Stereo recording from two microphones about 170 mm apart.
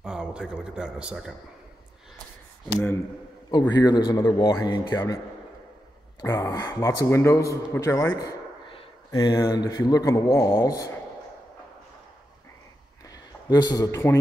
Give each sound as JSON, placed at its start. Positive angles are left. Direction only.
{"t": 0.0, "sound": "a man's voice", "side_deg": -5}
{"t": 3.5, "sound": "a man's voice", "side_deg": 25}
{"t": 6.2, "sound": "a man's voice", "side_deg": 20}
{"t": 13.0, "sound": "a sound", "side_deg": 20}